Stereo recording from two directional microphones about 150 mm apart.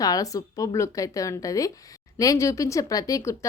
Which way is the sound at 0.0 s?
25° left (ahead or behind).